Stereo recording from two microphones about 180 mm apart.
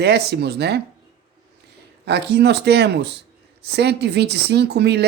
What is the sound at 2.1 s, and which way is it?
Speech, 70° right (ahead or behind).